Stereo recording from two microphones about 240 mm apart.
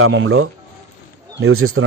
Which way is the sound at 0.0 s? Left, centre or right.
Right.